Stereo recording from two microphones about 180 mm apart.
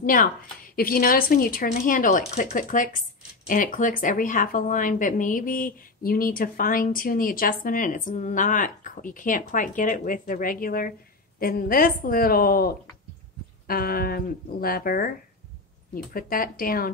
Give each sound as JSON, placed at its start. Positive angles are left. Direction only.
{"t": 0.0, "sound": "a woman's voice", "side_deg": 50}